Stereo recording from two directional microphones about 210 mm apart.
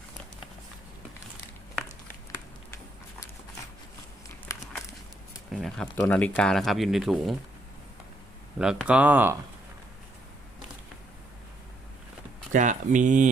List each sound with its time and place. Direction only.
4.5 s a sound: 15° left (ahead or behind)
5.5 s speech: 5° left (ahead or behind)
8.5 s speech: 5° right (ahead or behind)
12.5 s speech: 35° right (ahead or behind)